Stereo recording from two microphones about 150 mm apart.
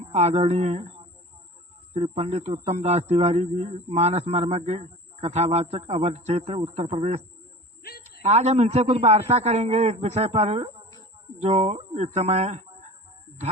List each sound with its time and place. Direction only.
0.0 s a man's voice: 45° right (ahead or behind)
1.9 s a man's voice: 45° right (ahead or behind)